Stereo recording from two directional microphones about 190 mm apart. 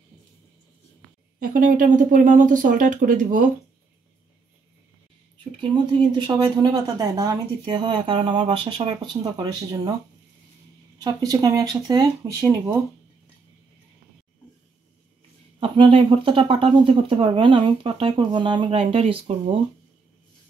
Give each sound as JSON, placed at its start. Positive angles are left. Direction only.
{"t": 1.4, "sound": "speech", "side_deg": -45}
{"t": 5.6, "sound": "speech", "side_deg": -25}
{"t": 11.0, "sound": "speech", "side_deg": -20}
{"t": 15.6, "sound": "speech", "side_deg": -30}